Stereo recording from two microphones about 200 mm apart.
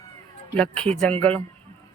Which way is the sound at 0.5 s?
5° left (ahead or behind).